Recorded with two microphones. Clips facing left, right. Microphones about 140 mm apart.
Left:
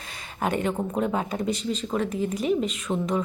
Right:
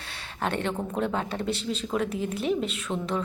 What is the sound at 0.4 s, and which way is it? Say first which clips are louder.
A woman's voice: left 3 dB; 5° left (ahead or behind).